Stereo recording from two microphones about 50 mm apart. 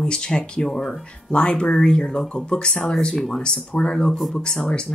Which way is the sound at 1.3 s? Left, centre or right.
Centre.